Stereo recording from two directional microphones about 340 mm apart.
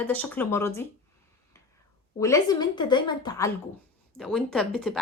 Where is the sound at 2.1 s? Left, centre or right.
Centre.